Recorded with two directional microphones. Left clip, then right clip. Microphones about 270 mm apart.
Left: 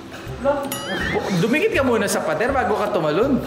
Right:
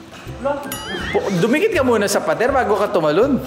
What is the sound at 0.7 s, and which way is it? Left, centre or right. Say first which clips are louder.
Speech: even; centre.